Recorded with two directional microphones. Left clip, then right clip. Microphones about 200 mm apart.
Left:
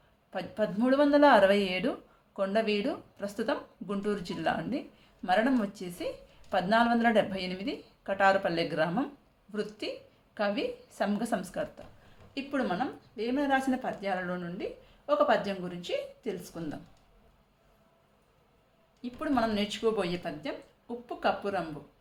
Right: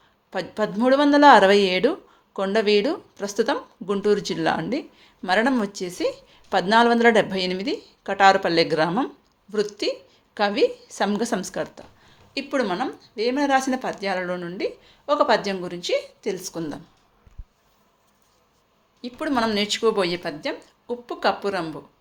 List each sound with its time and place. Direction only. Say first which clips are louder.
0.3 s a woman's voice: right 6 dB; 40° right (ahead or behind)
19.0 s a woman's voice: right 6 dB; 40° right (ahead or behind)